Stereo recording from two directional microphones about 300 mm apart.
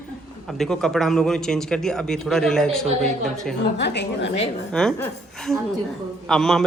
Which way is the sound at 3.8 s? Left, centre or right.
Left.